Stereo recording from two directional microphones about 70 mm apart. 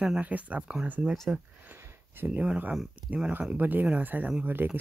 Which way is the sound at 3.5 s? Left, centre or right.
Right.